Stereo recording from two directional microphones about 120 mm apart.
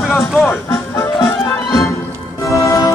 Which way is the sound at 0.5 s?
20° left (ahead or behind).